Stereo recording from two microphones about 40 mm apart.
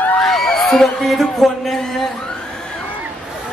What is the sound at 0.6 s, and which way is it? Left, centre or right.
Speech, centre.